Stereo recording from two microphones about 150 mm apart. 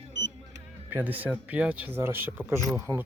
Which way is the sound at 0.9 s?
10° right (ahead or behind).